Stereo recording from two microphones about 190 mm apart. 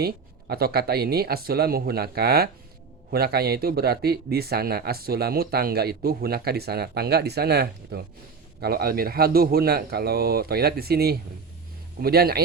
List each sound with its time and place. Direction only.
0.0 s speech: 55° right (ahead or behind)